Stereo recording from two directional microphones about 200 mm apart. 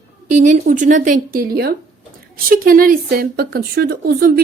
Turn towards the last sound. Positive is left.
turn(degrees=-50)  # may be behind; listen again after turning